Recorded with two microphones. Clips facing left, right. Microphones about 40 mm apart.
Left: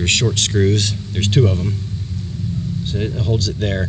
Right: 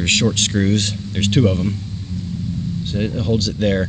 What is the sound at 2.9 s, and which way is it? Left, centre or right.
Speech, centre.